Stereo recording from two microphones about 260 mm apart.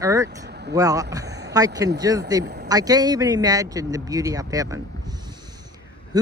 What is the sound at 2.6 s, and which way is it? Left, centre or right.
Speech, centre.